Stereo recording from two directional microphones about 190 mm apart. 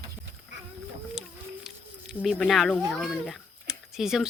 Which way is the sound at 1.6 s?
Centre (ahead or behind).